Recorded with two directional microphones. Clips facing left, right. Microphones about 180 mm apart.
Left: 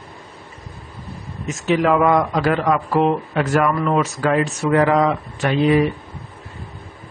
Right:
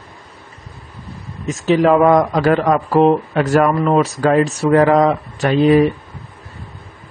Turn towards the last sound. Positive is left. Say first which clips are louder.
# right 4 dB
turn(degrees=-40)  # may be behind; listen again after turning